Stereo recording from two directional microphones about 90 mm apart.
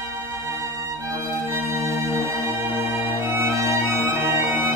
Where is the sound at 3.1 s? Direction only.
25° right (ahead or behind).